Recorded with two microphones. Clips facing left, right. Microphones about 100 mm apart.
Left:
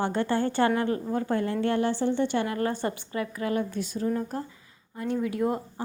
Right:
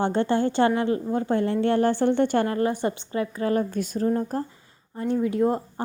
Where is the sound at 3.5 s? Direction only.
45° right (ahead or behind).